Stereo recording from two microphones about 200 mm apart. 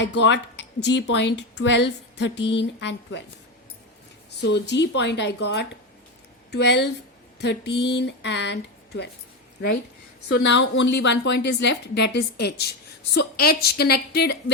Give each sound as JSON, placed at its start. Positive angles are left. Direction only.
{"t": 0.0, "sound": "speech", "side_deg": 60}
{"t": 4.4, "sound": "speech", "side_deg": 60}
{"t": 10.2, "sound": "a woman's voice", "side_deg": 60}